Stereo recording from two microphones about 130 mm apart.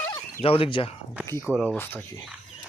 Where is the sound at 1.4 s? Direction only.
5° right (ahead or behind).